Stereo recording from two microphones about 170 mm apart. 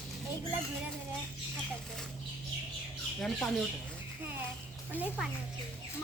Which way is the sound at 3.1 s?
Centre (ahead or behind).